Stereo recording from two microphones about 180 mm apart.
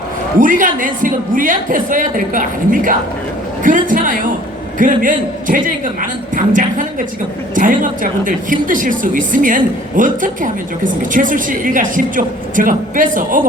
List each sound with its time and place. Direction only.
0.3 s a woman's voice: 45° right (ahead or behind)